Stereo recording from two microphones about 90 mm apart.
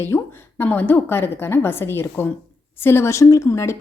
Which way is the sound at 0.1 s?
30° left (ahead or behind).